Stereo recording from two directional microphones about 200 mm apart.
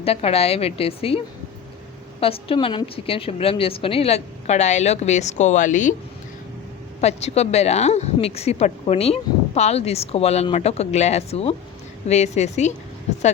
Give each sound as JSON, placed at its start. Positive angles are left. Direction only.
{"t": 0.0, "sound": "a woman's voice", "side_deg": 30}
{"t": 2.2, "sound": "a woman's voice", "side_deg": 30}
{"t": 7.0, "sound": "a woman's voice", "side_deg": 30}